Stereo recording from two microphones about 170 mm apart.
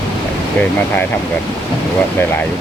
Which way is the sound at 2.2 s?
15° left (ahead or behind).